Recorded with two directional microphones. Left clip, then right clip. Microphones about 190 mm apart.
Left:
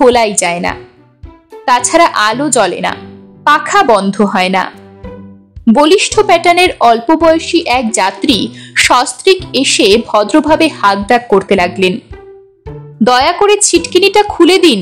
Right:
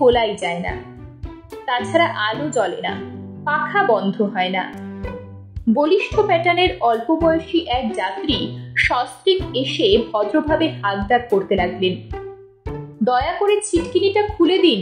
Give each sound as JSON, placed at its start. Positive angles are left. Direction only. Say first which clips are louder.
{"t": 0.0, "sound": "a woman's voice", "louder": "left 7 dB", "side_deg": 35}
{"t": 5.8, "sound": "a woman's voice", "louder": "left 9 dB", "side_deg": 45}
{"t": 13.0, "sound": "a woman's voice", "louder": "left 10 dB", "side_deg": 45}